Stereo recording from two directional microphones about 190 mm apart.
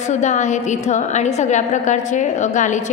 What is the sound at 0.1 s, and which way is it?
A woman's voice, 40° left (ahead or behind).